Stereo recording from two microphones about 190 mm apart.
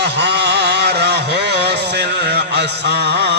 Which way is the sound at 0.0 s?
60° right (ahead or behind).